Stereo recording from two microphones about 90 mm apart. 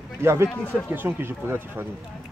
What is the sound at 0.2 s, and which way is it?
Speech, 30° right (ahead or behind).